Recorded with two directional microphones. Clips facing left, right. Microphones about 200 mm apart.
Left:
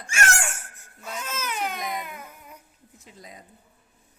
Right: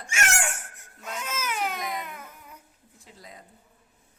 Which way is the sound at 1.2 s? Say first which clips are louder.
Even; 10° right (ahead or behind).